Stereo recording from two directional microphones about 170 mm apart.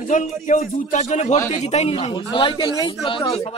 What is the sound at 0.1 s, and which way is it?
A man's voice, 45° left (ahead or behind).